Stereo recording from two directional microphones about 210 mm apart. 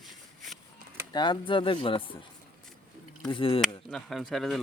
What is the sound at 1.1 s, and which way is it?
Speech, 20° left (ahead or behind).